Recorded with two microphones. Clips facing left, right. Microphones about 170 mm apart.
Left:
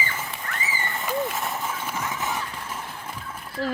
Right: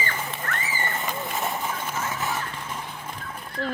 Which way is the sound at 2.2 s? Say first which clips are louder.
Even; 5° left (ahead or behind).